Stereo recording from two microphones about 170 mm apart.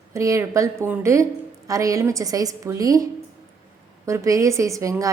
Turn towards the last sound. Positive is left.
turn(degrees=-20)  # may be behind; listen again after turning